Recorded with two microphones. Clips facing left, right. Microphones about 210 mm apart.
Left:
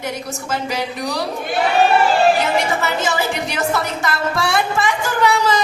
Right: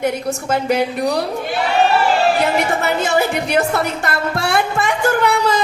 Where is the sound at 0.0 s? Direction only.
55° right (ahead or behind).